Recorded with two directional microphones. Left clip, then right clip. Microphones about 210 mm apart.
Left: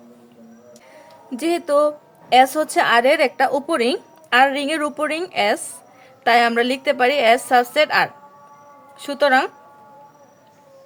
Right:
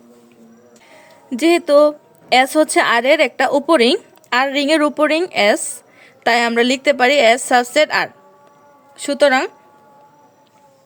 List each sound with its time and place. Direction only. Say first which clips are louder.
1.3 s a woman's voice: right 6 dB; 30° right (ahead or behind)